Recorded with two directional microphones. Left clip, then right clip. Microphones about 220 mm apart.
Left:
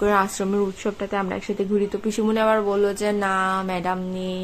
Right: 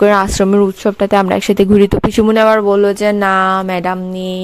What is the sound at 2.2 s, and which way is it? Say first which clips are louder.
Speech: right 10 dB; 40° right (ahead or behind).